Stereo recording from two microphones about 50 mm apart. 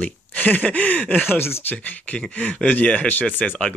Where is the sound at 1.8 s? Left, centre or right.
Left.